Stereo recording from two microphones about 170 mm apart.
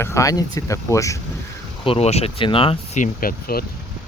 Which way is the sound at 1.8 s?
35° left (ahead or behind).